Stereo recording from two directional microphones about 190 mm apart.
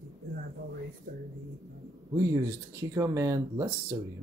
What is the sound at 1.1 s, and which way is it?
Speech, 45° right (ahead or behind).